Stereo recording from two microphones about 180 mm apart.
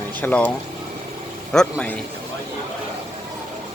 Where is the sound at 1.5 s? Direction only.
5° left (ahead or behind).